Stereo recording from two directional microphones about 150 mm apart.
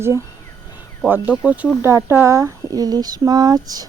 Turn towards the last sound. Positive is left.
turn(degrees=-25)  # may be behind; listen again after turning